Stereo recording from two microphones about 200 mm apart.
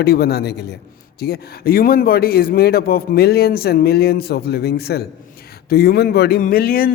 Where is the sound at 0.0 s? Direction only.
50° left (ahead or behind).